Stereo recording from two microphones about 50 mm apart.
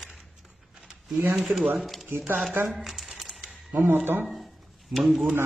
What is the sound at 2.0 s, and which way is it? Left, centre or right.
Speech, right.